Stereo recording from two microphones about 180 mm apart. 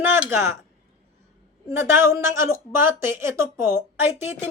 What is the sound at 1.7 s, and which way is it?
Speech, 15° right (ahead or behind).